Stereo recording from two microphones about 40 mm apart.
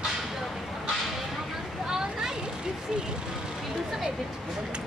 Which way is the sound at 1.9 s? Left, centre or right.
Centre.